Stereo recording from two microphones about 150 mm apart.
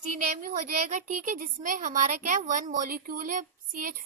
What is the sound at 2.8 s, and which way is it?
A child's voice, 70° right (ahead or behind).